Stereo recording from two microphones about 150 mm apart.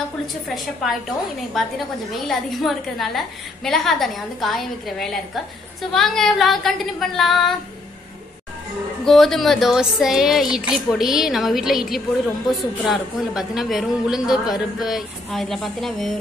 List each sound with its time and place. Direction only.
1.6 s a woman's voice: centre (ahead or behind)
9.0 s a woman's voice: centre (ahead or behind)